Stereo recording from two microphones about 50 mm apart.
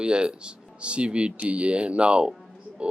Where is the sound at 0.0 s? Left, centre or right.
Centre.